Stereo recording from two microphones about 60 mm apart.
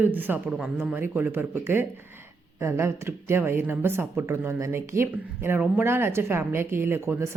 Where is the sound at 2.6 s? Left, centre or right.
Right.